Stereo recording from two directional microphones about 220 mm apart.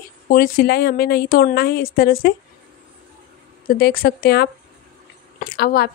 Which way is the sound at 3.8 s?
45° left (ahead or behind).